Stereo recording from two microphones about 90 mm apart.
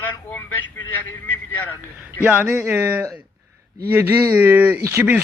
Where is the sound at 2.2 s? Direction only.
20° right (ahead or behind).